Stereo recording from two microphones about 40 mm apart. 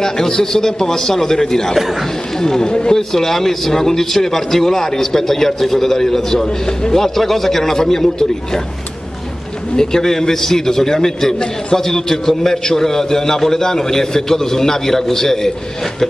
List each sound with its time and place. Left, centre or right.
0.0 s a man's voice: centre
1.8 s speech: centre
2.3 s a man's voice: centre
3.0 s a man's voice: centre
9.8 s a man's voice: centre